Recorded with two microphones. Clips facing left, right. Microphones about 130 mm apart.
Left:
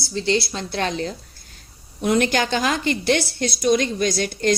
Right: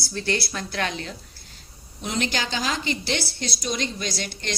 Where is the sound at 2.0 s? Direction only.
55° left (ahead or behind).